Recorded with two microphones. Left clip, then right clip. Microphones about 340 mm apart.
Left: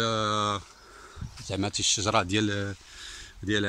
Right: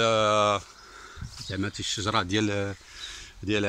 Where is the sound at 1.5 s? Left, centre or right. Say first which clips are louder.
Left 4 dB; centre.